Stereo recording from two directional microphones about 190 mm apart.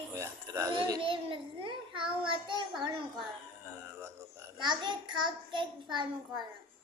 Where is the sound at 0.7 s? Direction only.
25° right (ahead or behind).